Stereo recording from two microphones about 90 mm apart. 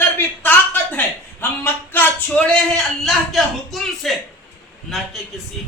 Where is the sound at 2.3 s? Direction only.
10° left (ahead or behind).